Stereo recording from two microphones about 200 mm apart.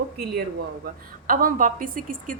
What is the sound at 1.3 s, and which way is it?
A woman's voice, 45° right (ahead or behind).